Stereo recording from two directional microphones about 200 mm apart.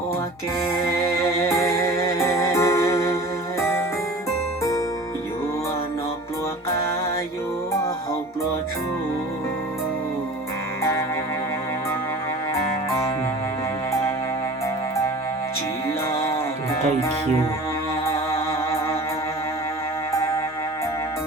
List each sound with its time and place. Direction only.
0.9 s music: 15° left (ahead or behind)
16.1 s music: 15° left (ahead or behind)